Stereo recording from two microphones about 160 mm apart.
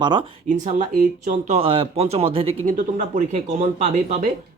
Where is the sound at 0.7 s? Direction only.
50° right (ahead or behind).